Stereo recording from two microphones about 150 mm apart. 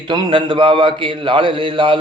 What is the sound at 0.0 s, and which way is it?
A man's voice, 30° right (ahead or behind).